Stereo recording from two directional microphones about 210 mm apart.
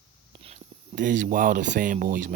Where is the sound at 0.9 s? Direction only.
40° right (ahead or behind).